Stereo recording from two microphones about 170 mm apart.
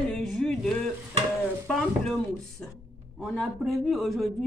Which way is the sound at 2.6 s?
5° left (ahead or behind).